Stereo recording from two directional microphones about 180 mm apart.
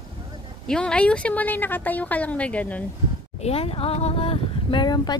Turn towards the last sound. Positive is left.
turn(degrees=25)  # may be behind; listen again after turning